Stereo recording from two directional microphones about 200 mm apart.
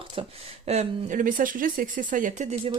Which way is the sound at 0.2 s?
30° right (ahead or behind).